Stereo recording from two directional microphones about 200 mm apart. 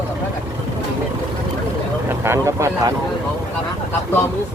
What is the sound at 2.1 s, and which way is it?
Speech, 15° right (ahead or behind).